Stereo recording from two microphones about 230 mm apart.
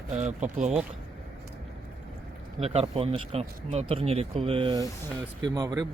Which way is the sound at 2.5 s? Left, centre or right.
Right.